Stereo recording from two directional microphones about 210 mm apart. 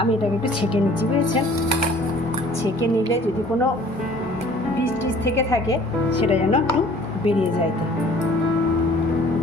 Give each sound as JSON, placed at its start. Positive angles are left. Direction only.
{"t": 5.2, "sound": "a woman's voice", "side_deg": 15}
{"t": 6.2, "sound": "speech", "side_deg": 25}